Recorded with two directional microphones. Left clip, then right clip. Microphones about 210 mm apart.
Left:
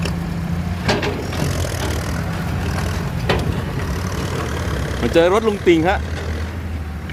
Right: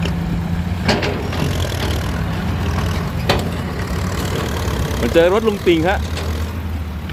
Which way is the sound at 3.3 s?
45° right (ahead or behind).